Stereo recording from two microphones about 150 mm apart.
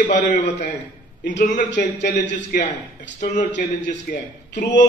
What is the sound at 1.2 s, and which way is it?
A man's voice, 55° left (ahead or behind).